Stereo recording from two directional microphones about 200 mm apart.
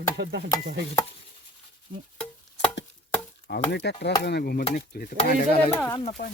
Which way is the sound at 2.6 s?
65° left (ahead or behind).